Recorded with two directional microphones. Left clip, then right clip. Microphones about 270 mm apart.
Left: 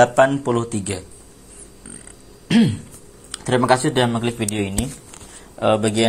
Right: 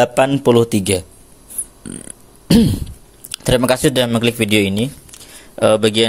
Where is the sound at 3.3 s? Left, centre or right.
Right.